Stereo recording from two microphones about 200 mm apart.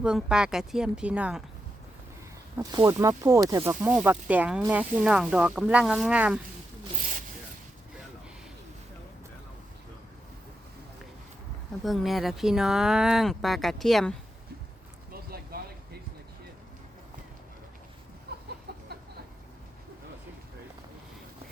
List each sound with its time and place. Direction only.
0.0 s speech: 5° right (ahead or behind)
2.6 s speech: 15° right (ahead or behind)
7.0 s zipper: 40° right (ahead or behind)
11.8 s speech: centre (ahead or behind)
15.1 s a sound: 50° right (ahead or behind)
18.3 s a sound: 55° right (ahead or behind)